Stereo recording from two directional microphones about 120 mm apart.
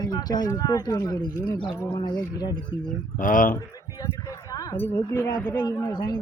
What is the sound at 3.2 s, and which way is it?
Speech, 90° left.